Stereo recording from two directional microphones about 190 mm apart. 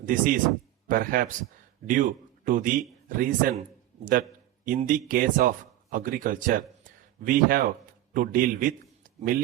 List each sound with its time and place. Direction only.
0.0 s a man's voice: 45° right (ahead or behind)
4.6 s a man's voice: 45° right (ahead or behind)